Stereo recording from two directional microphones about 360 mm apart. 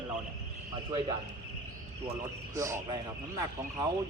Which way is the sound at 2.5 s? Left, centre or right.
Centre.